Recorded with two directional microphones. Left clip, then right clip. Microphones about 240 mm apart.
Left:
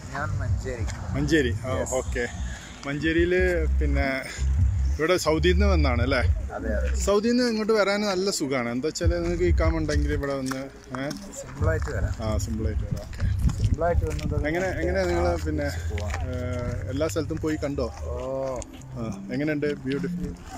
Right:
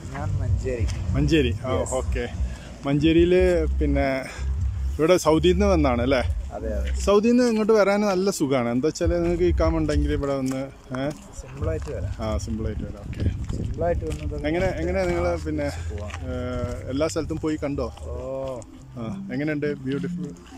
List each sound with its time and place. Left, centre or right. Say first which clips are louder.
0.2 s speech: even; centre
1.1 s speech: right 1 dB; centre
2.8 s speech: right 5 dB; centre
11.6 s speech: left 1 dB; centre
13.8 s speech: even; centre